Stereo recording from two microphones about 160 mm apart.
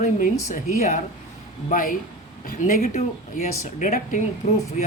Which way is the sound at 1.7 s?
60° left (ahead or behind).